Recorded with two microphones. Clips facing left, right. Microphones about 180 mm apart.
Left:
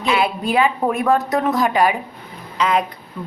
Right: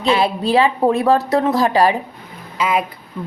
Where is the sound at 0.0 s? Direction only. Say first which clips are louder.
Right 3 dB; 30° right (ahead or behind).